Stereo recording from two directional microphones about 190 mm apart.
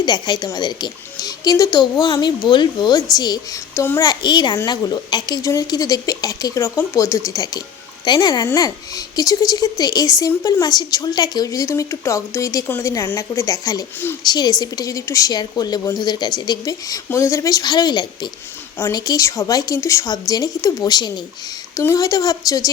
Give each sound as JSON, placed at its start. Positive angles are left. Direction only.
{"t": 0.0, "sound": "speech", "side_deg": 20}